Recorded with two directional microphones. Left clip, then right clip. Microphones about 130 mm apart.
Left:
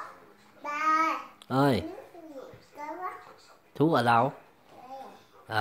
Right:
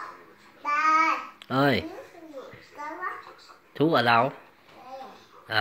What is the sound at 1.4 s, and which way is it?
Speech, 10° left (ahead or behind).